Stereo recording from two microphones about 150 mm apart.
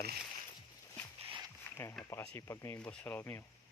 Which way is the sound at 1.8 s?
15° left (ahead or behind).